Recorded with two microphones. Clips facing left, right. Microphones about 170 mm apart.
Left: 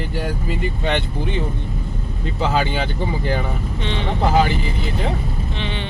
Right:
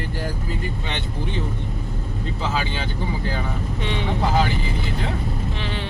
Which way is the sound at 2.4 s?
65° left (ahead or behind).